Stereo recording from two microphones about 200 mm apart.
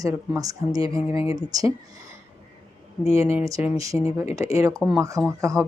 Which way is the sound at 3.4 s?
10° right (ahead or behind).